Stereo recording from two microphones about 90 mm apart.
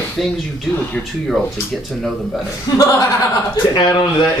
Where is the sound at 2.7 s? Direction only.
45° left (ahead or behind).